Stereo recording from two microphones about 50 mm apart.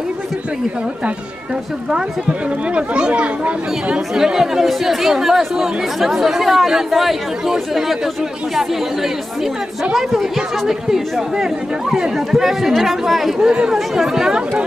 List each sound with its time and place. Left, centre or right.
2.7 s speech: right
4.1 s speech: centre
13.5 s speech: centre
13.7 s speech: centre